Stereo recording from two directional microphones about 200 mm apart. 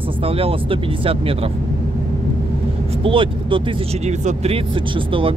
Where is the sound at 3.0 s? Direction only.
25° right (ahead or behind).